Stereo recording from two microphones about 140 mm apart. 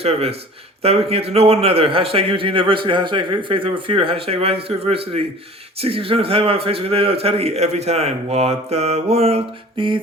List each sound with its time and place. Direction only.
0.0 s a man's voice: 45° right (ahead or behind)